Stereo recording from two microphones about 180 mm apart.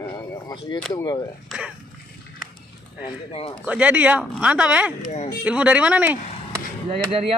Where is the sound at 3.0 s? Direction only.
30° left (ahead or behind).